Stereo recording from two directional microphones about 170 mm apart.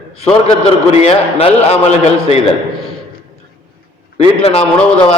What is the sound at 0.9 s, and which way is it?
A man's voice, 35° left (ahead or behind).